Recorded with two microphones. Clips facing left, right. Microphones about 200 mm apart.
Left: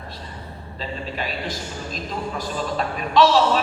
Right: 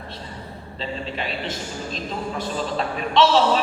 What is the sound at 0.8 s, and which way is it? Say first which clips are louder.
A woman's voice: even; 25° right (ahead or behind).